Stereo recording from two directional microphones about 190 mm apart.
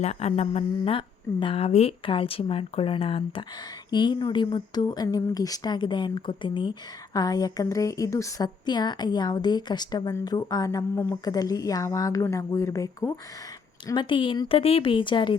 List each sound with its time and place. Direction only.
0.0 s a woman's voice: 35° left (ahead or behind)